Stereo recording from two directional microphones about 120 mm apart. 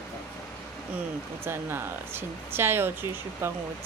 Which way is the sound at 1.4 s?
20° right (ahead or behind).